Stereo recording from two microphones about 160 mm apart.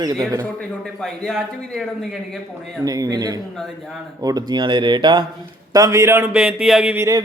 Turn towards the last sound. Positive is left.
turn(degrees=-5)  # may be behind; listen again after turning